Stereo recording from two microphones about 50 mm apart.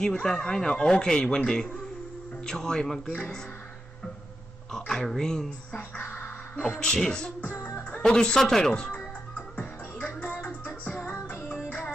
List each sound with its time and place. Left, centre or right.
0.2 s speech: centre
4.6 s speech: centre
8.7 s speech: centre
9.6 s music: left